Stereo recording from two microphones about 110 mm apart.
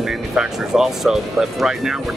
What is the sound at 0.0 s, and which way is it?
Speech, 5° right (ahead or behind).